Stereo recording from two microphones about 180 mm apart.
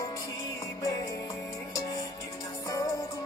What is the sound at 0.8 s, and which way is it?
Music, 20° left (ahead or behind).